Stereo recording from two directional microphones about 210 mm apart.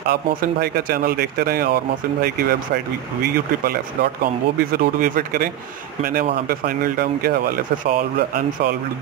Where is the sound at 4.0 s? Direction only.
45° right (ahead or behind).